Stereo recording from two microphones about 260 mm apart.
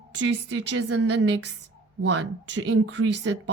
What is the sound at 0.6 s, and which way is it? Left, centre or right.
Speech, right.